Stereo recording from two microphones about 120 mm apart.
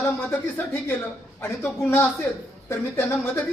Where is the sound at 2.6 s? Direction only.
25° left (ahead or behind).